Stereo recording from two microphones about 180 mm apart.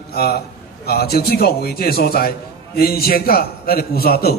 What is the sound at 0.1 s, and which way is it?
A man's voice, 60° left (ahead or behind).